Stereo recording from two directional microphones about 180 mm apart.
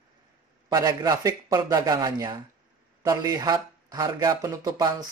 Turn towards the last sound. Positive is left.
turn(degrees=-20)  # may be behind; listen again after turning